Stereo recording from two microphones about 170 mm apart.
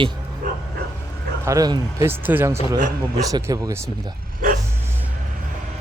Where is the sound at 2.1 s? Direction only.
10° right (ahead or behind).